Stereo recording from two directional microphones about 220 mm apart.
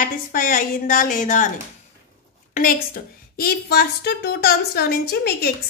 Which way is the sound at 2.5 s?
40° left (ahead or behind).